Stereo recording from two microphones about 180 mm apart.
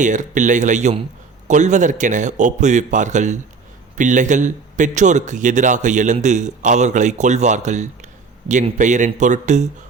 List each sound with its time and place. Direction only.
0.0 s a man's voice: 45° right (ahead or behind)